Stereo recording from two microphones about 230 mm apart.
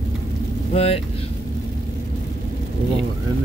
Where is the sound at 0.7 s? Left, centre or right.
Left.